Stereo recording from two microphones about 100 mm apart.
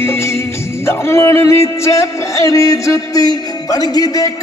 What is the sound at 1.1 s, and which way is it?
Music, 25° left (ahead or behind).